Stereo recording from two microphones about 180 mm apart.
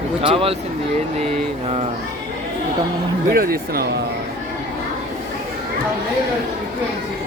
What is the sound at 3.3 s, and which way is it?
Speech, 55° right (ahead or behind).